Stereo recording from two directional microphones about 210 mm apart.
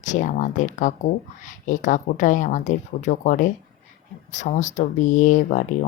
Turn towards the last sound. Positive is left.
turn(degrees=35)  # may be behind; listen again after turning